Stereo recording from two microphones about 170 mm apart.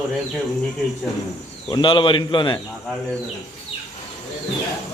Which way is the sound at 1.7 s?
30° left (ahead or behind).